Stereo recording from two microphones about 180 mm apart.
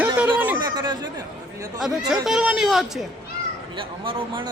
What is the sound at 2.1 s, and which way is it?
Speech, centre (ahead or behind).